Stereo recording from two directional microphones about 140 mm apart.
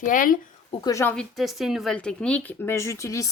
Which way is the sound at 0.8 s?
25° left (ahead or behind).